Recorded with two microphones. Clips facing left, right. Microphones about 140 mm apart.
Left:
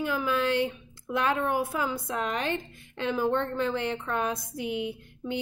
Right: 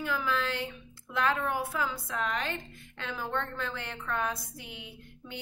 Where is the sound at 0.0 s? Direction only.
20° left (ahead or behind).